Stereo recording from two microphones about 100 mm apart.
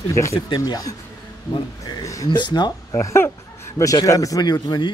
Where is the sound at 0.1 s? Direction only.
30° left (ahead or behind).